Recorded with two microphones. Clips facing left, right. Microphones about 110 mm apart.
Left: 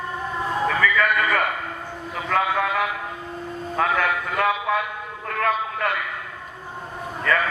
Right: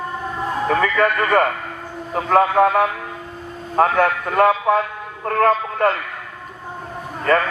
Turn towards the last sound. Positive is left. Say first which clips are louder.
# right 5 dB
turn(degrees=-35)  # may be behind; listen again after turning